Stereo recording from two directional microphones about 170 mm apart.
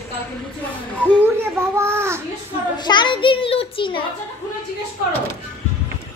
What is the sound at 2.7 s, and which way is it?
A child's voice, 25° left (ahead or behind).